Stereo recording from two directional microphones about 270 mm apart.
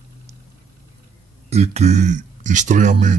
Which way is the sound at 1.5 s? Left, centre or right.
Right.